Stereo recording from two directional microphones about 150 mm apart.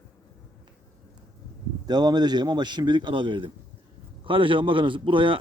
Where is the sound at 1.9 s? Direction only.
25° right (ahead or behind).